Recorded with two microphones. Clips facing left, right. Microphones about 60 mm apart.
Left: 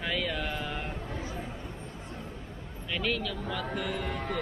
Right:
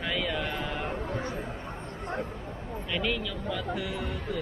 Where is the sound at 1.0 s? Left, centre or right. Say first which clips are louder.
Right 4 dB; right.